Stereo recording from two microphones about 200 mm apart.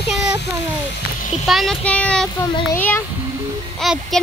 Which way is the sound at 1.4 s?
Centre (ahead or behind).